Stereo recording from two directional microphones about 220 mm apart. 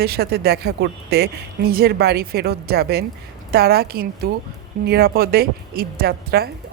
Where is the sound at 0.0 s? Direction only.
45° right (ahead or behind).